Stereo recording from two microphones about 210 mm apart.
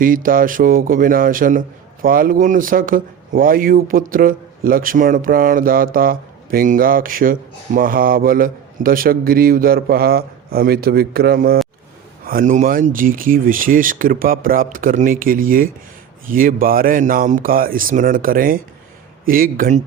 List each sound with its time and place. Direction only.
0.0 s a man's voice: 40° right (ahead or behind)